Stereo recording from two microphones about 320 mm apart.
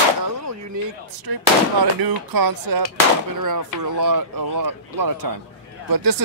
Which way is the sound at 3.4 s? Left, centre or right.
Right.